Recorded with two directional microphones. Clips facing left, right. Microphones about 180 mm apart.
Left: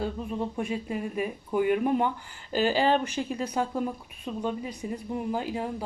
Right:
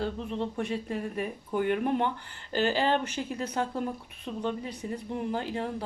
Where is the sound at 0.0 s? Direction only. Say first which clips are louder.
Left 1 dB; 10° left (ahead or behind).